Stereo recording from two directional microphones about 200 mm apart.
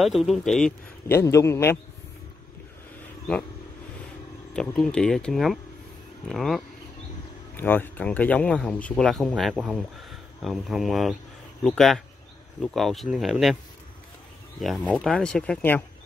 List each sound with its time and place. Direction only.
0.0 s a man's voice: centre (ahead or behind)
4.6 s speech: 5° left (ahead or behind)
14.6 s speech: 5° left (ahead or behind)